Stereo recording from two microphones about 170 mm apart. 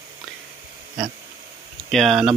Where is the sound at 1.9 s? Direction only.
Centre (ahead or behind).